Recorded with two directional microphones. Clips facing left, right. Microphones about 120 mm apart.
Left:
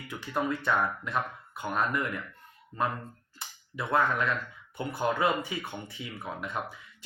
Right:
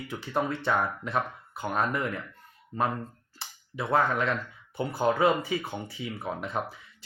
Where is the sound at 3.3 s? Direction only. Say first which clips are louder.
Right 2 dB; 30° right (ahead or behind).